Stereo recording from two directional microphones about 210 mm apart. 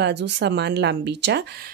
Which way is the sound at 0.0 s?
55° right (ahead or behind).